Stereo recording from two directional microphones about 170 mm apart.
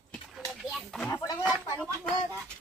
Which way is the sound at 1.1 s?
20° left (ahead or behind).